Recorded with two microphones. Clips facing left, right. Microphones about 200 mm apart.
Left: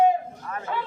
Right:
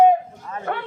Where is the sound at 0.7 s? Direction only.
65° right (ahead or behind).